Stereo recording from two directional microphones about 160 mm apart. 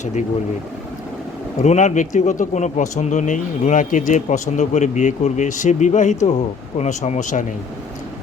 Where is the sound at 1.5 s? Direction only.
45° left (ahead or behind).